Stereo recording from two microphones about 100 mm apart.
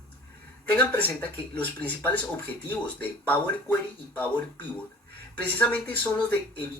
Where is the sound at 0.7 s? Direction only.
15° left (ahead or behind).